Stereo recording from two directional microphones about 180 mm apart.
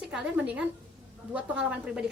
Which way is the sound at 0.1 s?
5° right (ahead or behind).